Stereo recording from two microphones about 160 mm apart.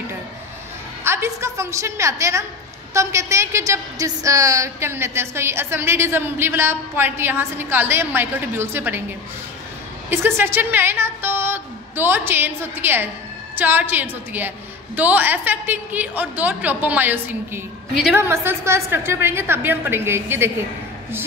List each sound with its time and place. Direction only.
1.0 s a woman's voice: 15° right (ahead or behind)
10.0 s a woman's voice: 15° right (ahead or behind)